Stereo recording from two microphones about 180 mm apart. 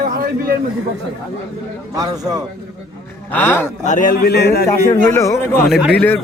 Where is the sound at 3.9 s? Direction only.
45° left (ahead or behind); by 4.6 s 65° left (ahead or behind).